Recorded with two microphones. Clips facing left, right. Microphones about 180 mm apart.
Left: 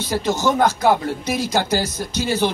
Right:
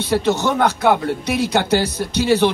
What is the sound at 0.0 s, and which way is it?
Speech, 65° right (ahead or behind).